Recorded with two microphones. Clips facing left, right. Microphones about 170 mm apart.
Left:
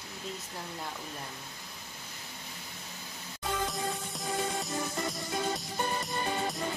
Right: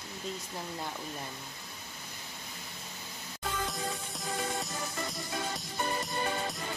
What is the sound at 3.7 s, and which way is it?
Music, centre (ahead or behind).